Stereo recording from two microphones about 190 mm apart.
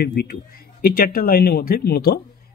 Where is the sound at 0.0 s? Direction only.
55° left (ahead or behind).